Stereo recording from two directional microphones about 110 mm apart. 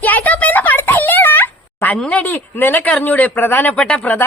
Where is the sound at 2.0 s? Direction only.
10° left (ahead or behind).